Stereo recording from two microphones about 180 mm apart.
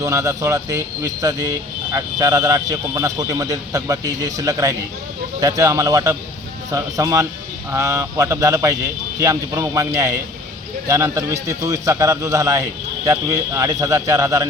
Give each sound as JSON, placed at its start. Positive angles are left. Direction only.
{"t": 0.0, "sound": "a man's voice", "side_deg": -15}